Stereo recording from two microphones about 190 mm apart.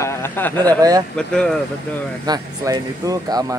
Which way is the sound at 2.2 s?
20° right (ahead or behind).